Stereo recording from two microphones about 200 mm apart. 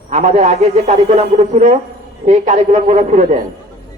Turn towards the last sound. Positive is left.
turn(degrees=-35)  # may be behind; listen again after turning